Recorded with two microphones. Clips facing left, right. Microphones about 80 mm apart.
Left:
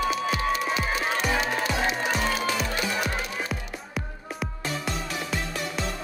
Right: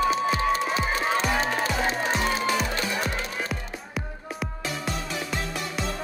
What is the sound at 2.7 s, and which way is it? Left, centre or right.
Music, centre.